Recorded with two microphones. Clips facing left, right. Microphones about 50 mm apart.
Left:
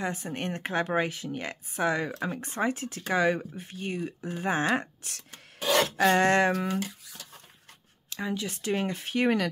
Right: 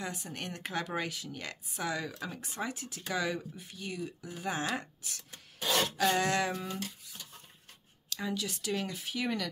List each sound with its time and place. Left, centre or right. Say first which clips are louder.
0.0 s speech: left 7 dB; left
6.5 s speech: left 8 dB; left
7.1 s a sound: left 2 dB; left
8.1 s speech: left 3 dB; left